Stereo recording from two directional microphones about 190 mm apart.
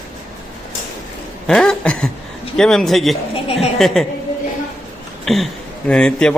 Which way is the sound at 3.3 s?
30° left (ahead or behind).